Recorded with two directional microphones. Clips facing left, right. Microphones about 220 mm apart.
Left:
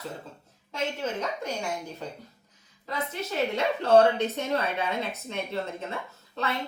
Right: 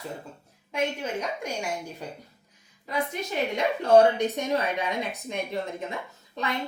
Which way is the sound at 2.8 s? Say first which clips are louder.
Right 3 dB; 15° right (ahead or behind).